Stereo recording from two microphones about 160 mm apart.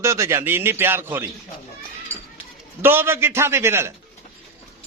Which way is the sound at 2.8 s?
15° right (ahead or behind).